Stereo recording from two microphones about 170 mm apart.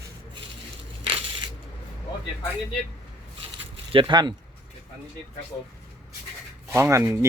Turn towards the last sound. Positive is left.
turn(degrees=-15)  # may be behind; listen again after turning